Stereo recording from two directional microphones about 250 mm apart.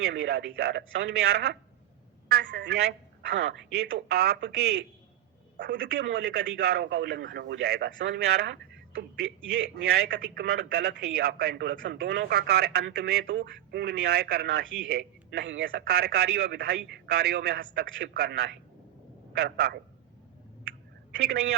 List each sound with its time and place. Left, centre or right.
0.0 s a man's voice: right
21.2 s a man's voice: right